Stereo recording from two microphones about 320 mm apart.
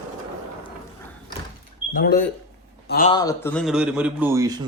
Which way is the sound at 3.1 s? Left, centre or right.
Centre.